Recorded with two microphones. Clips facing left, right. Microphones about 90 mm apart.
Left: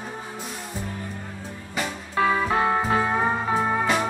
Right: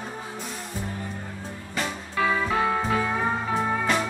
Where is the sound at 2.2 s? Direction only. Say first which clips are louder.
Left 2 dB; 35° left (ahead or behind).